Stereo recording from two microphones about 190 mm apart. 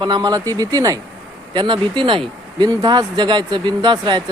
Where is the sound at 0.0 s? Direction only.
20° right (ahead or behind).